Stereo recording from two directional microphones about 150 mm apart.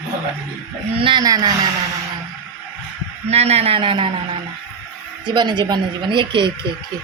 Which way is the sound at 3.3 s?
45° right (ahead or behind).